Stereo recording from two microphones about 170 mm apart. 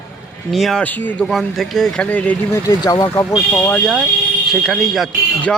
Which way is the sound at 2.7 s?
20° left (ahead or behind).